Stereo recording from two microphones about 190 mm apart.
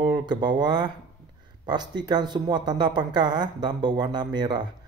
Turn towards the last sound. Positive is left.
turn(degrees=-25)  # may be behind; listen again after turning